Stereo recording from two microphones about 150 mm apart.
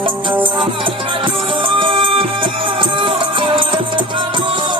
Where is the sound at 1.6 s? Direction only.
35° right (ahead or behind).